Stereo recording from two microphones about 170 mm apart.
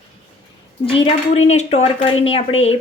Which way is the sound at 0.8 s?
35° left (ahead or behind).